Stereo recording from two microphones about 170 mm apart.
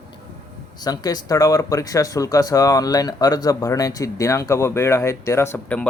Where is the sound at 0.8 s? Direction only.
25° left (ahead or behind).